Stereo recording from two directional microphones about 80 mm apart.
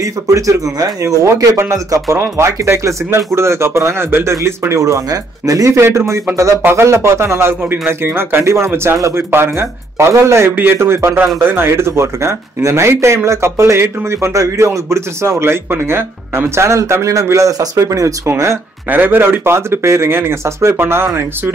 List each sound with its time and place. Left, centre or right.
0.0 s speech: right
18.2 s speech: right
18.9 s speech: right